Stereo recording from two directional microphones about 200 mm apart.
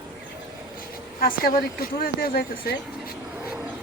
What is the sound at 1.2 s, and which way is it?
Speech, 50° left (ahead or behind).